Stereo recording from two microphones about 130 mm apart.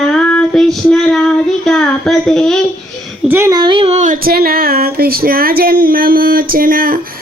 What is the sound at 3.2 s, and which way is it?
Speech, 15° right (ahead or behind).